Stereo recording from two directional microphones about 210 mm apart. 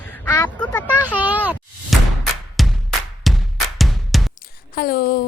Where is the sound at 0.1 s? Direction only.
10° left (ahead or behind).